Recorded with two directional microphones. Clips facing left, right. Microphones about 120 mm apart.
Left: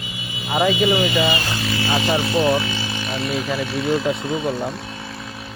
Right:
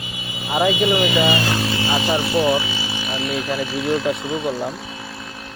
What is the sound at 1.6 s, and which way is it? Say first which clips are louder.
Vehicle: right 1 dB; 20° right (ahead or behind).